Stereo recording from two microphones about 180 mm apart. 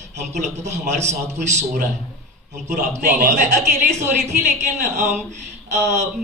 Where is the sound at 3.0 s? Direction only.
50° right (ahead or behind).